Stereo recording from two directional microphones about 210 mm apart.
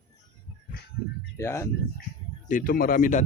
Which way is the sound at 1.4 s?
15° left (ahead or behind).